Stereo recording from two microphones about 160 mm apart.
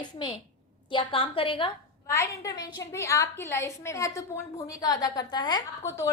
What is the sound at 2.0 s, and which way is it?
A woman's voice, 20° left (ahead or behind).